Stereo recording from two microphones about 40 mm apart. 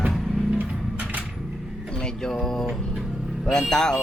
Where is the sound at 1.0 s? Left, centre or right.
Right.